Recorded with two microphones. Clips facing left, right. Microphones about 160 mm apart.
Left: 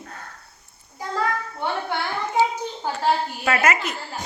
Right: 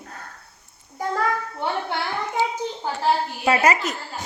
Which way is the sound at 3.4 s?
30° right (ahead or behind).